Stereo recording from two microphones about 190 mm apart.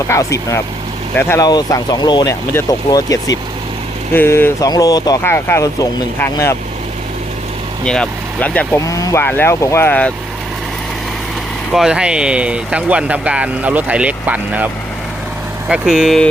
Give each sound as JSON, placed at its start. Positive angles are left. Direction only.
{"t": 0.1, "sound": "speech", "side_deg": 15}
{"t": 7.9, "sound": "speech", "side_deg": 5}
{"t": 11.7, "sound": "speech", "side_deg": -5}
{"t": 15.7, "sound": "speech", "side_deg": -5}